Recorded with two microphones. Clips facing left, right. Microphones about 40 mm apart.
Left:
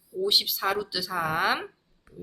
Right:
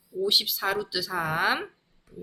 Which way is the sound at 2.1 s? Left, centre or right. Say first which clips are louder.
Right 1 dB; right.